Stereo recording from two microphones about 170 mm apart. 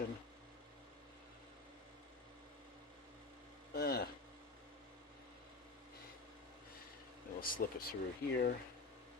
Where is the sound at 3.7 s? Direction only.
65° left (ahead or behind).